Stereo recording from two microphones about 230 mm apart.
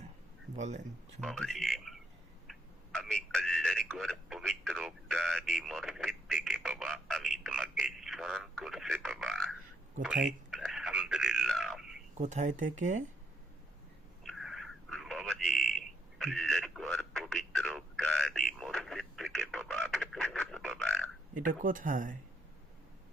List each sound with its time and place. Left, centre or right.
0.5 s speech: right
1.2 s speech: centre
10.0 s a sound: centre
12.1 s speech: right
14.3 s a sound: centre
21.3 s speech: right